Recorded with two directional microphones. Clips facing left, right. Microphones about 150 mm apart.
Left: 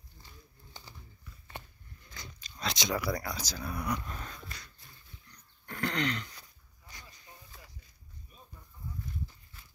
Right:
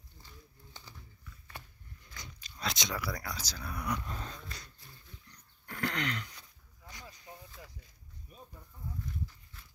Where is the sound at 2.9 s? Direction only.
20° left (ahead or behind).